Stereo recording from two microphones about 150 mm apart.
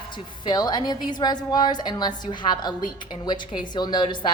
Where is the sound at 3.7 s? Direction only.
30° left (ahead or behind).